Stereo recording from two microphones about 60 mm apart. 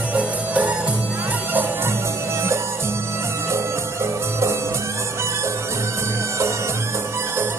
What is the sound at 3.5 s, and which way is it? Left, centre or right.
Music, right.